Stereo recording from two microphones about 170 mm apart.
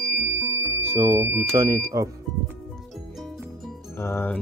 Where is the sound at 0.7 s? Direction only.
15° right (ahead or behind).